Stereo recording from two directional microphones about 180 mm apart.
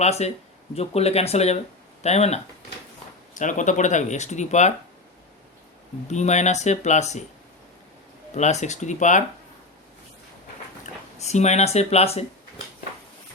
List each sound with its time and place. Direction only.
0.0 s speech: 35° left (ahead or behind)
6.1 s speech: 40° left (ahead or behind)
8.4 s speech: 40° left (ahead or behind)
11.2 s speech: 40° left (ahead or behind)